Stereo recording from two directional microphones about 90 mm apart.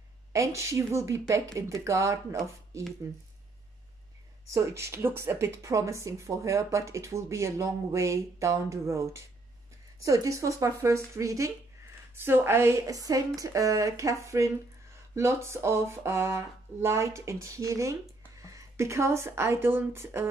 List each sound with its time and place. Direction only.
0.3 s speech: 35° right (ahead or behind)
4.5 s speech: 35° right (ahead or behind)
12.2 s a woman's voice: 25° right (ahead or behind)